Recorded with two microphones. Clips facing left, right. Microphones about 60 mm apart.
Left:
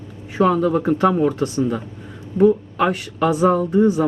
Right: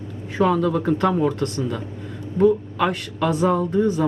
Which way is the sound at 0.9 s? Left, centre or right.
Centre.